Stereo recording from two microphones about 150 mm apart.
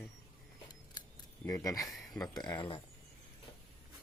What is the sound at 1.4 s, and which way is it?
Speech, 20° left (ahead or behind).